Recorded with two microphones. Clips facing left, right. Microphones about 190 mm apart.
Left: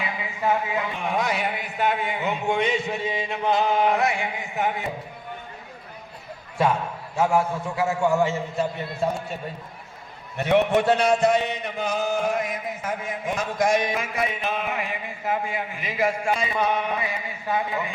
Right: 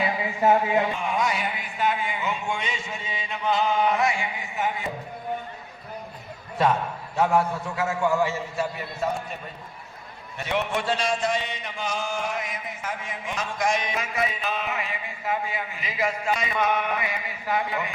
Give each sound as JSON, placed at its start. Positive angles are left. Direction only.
{"t": 0.0, "sound": "speech", "side_deg": -35}
{"t": 0.9, "sound": "speech", "side_deg": 60}
{"t": 7.2, "sound": "a man's voice", "side_deg": 10}
{"t": 10.3, "sound": "speech", "side_deg": 55}
{"t": 13.6, "sound": "a sound", "side_deg": 50}
{"t": 16.3, "sound": "a man's voice", "side_deg": 30}